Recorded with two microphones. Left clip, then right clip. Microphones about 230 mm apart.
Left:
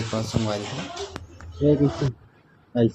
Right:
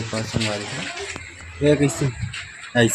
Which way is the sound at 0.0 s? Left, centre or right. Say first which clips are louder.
Right 2 dB; centre.